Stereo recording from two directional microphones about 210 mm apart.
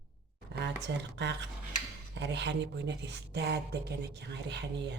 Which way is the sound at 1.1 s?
55° right (ahead or behind).